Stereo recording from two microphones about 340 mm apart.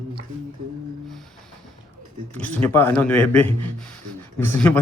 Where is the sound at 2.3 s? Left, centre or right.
Centre.